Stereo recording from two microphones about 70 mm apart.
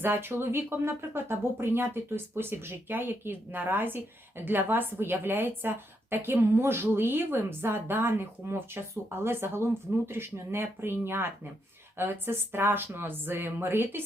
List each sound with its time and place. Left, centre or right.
0.0 s speech: right